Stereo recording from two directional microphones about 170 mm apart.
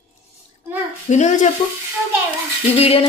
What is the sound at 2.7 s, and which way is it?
Speech, 35° left (ahead or behind).